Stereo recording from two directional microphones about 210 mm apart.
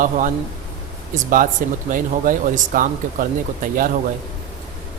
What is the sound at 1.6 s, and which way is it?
Speech, 40° right (ahead or behind).